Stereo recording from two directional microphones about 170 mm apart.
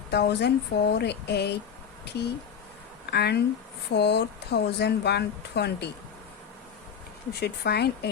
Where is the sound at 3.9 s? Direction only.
85° left.